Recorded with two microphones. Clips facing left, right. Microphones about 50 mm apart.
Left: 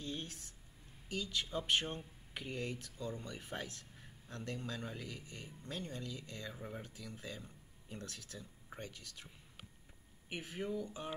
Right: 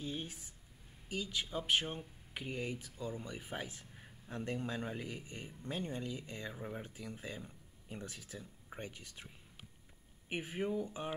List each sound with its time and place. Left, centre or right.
0.0 s speech: centre
10.3 s speech: centre